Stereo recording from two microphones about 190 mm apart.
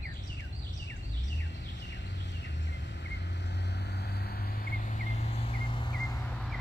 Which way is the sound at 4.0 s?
55° left (ahead or behind).